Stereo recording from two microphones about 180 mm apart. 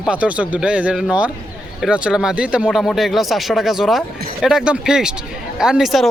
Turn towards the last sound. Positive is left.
turn(degrees=0)  # may be behind; listen again after turning